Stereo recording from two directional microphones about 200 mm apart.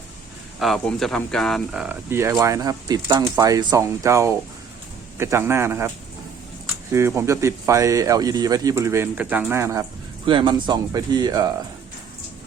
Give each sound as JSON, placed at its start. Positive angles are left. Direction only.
{"t": 0.6, "sound": "speech", "side_deg": 0}
{"t": 6.9, "sound": "speech", "side_deg": -10}
{"t": 10.2, "sound": "speech", "side_deg": -25}